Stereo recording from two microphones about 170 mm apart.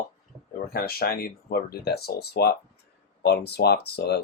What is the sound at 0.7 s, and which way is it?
Speech, 65° left (ahead or behind).